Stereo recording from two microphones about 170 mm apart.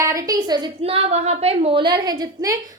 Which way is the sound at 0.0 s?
20° right (ahead or behind).